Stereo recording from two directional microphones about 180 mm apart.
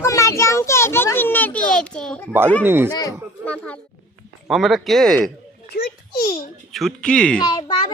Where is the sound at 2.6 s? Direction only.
10° right (ahead or behind).